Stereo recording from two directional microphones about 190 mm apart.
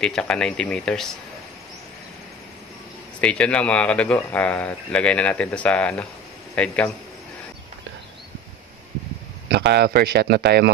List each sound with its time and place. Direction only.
0.0 s speech: 5° left (ahead or behind)
3.2 s speech: 5° left (ahead or behind)
9.5 s speech: 65° right (ahead or behind)